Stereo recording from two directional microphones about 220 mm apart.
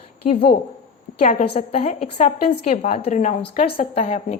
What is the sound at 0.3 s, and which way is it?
A woman's voice, 25° left (ahead or behind).